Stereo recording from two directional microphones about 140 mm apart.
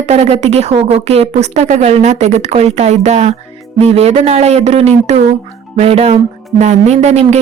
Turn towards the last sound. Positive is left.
turn(degrees=-55)  # may be behind; listen again after turning